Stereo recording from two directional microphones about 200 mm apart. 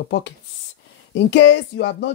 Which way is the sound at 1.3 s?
60° left (ahead or behind).